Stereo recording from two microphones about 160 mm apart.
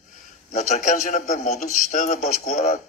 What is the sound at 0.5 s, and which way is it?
A man's voice, 50° left (ahead or behind).